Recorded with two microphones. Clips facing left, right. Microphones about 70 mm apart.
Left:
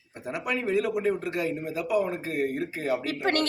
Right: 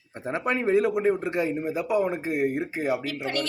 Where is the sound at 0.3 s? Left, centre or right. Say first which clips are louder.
Right 4 dB; right.